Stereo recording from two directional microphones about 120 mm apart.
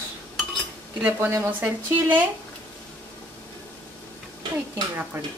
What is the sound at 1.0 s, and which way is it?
Speech, 20° right (ahead or behind).